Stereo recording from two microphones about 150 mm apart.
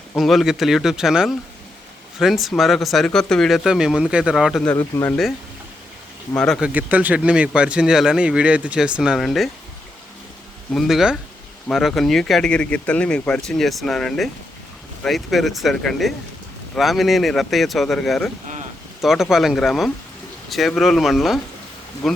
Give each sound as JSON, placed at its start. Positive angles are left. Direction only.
{"t": 0.2, "sound": "speech", "side_deg": 0}
{"t": 4.7, "sound": "speech", "side_deg": 15}
{"t": 6.3, "sound": "speech", "side_deg": 5}
{"t": 6.6, "sound": "speech", "side_deg": -10}
{"t": 10.8, "sound": "speech", "side_deg": 0}